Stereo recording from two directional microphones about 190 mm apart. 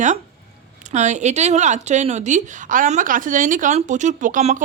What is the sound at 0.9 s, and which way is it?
A woman's voice, 40° right (ahead or behind).